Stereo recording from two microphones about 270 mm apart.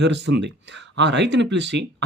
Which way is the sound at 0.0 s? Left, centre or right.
Right.